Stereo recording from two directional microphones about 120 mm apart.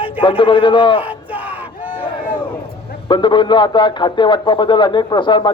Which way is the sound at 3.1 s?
40° left (ahead or behind).